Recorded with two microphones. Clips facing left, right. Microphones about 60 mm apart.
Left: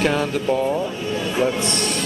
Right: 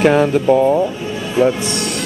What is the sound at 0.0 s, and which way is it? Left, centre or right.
Speech, centre.